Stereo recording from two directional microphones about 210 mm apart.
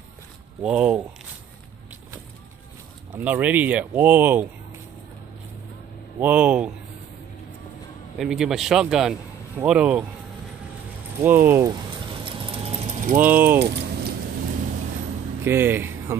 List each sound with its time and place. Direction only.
0.6 s speech: 5° right (ahead or behind)
3.2 s speech: 10° right (ahead or behind)
6.1 s speech: 5° right (ahead or behind)
8.2 s speech: centre (ahead or behind)
11.2 s speech: 10° right (ahead or behind)
12.3 s a sound: 25° right (ahead or behind)
13.2 s speech: 10° right (ahead or behind)
13.6 s keys jangling: 55° right (ahead or behind)
15.4 s speech: 10° right (ahead or behind)